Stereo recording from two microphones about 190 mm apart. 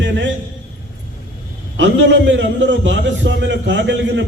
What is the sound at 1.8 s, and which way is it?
A man's voice, 70° right (ahead or behind).